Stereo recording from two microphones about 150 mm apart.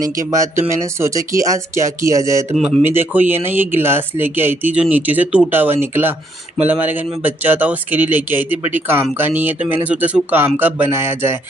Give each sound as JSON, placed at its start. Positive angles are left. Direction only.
{"t": 0.0, "sound": "speech", "side_deg": -20}